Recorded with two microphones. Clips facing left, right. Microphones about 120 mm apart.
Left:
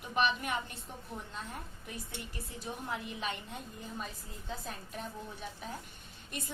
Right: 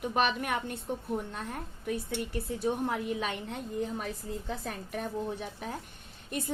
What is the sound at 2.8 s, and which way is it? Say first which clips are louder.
A woman's voice: right 7 dB; 60° right (ahead or behind).